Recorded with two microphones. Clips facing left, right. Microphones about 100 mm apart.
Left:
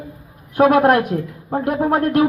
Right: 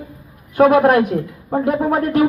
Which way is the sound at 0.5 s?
10° left (ahead or behind).